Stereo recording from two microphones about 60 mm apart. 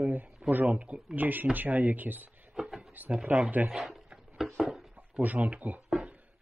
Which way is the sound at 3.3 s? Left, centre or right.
Right.